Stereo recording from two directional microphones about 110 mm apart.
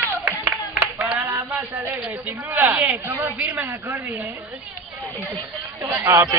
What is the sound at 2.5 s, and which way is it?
A man's voice, 20° right (ahead or behind).